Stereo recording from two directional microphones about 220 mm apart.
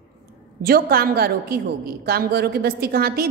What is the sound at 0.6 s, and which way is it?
A woman's voice, 45° right (ahead or behind).